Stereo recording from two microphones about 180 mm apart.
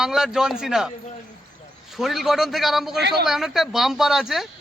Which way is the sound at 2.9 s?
65° right (ahead or behind).